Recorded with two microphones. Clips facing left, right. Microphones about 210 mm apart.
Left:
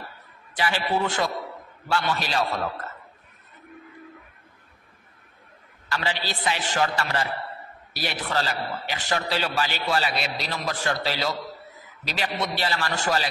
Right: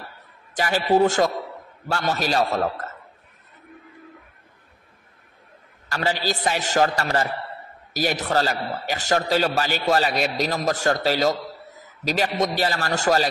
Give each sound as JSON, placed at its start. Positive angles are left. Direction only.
{"t": 0.6, "sound": "a man's voice", "side_deg": -40}
{"t": 5.9, "sound": "a man's voice", "side_deg": -45}